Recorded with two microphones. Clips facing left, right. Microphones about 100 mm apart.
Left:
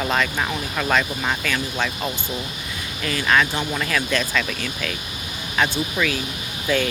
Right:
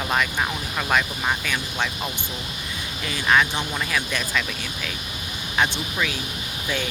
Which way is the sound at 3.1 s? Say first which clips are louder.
Left 1 dB; 10° right (ahead or behind).